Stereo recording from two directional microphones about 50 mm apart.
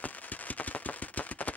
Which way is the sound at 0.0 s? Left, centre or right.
Left.